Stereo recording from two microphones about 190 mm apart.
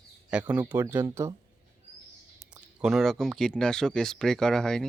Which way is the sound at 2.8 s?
Centre (ahead or behind).